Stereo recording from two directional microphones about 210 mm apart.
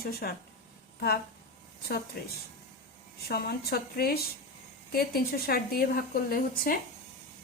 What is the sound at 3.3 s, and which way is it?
A woman's voice, 45° left (ahead or behind).